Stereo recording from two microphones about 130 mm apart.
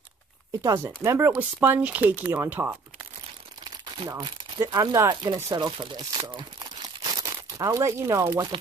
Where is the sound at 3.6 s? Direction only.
35° right (ahead or behind).